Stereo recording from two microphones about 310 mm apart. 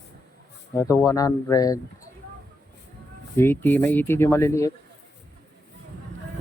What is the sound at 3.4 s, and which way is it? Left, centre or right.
Speech, centre.